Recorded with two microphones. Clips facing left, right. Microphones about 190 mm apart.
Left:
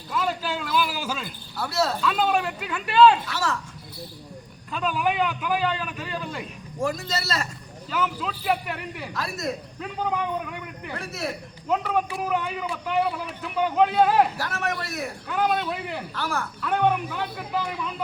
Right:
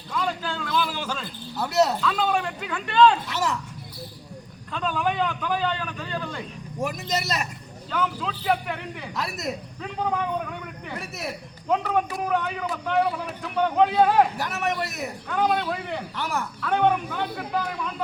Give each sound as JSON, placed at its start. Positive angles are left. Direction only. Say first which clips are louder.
{"t": 0.1, "sound": "a man's voice", "louder": "left 1 dB", "side_deg": 5}
{"t": 1.5, "sound": "a man's voice", "louder": "right 4 dB", "side_deg": -20}
{"t": 2.0, "sound": "a man's voice", "louder": "left 1 dB", "side_deg": 10}
{"t": 3.2, "sound": "a man's voice", "louder": "right 1 dB", "side_deg": -20}
{"t": 4.7, "sound": "a man's voice", "louder": "left 1 dB", "side_deg": 5}
{"t": 6.8, "sound": "a man's voice", "louder": "even", "side_deg": -15}
{"t": 7.9, "sound": "a man's voice", "louder": "even", "side_deg": 5}
{"t": 9.1, "sound": "a man's voice", "louder": "even", "side_deg": -20}
{"t": 10.9, "sound": "a man's voice", "louder": "left 3 dB", "side_deg": -15}
{"t": 11.7, "sound": "a man's voice", "louder": "right 1 dB", "side_deg": 5}
{"t": 14.3, "sound": "a man's voice", "louder": "right 2 dB", "side_deg": -20}
{"t": 15.3, "sound": "a man's voice", "louder": "right 1 dB", "side_deg": 5}
{"t": 16.1, "sound": "a man's voice", "louder": "left 1 dB", "side_deg": -20}
{"t": 16.6, "sound": "a man's voice", "louder": "right 1 dB", "side_deg": 5}